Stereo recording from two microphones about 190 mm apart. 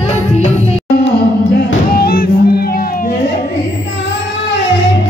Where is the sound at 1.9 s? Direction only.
50° left (ahead or behind).